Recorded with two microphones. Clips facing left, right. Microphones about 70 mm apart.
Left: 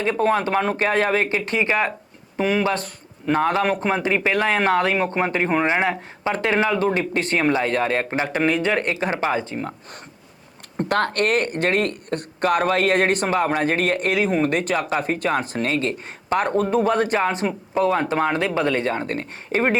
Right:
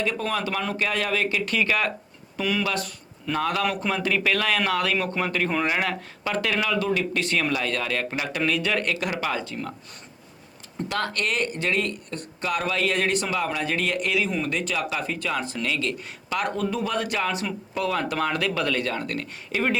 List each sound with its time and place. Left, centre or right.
0.0 s speech: left
10.8 s speech: left